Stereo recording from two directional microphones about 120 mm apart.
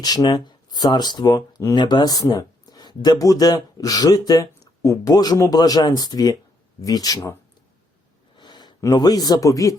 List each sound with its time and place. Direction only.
0.0 s speech: 35° left (ahead or behind)
8.4 s speech: 35° left (ahead or behind)